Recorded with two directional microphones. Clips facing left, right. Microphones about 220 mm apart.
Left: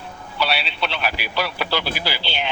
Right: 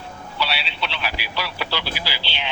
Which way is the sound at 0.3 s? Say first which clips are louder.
Left 3 dB; 50° left (ahead or behind).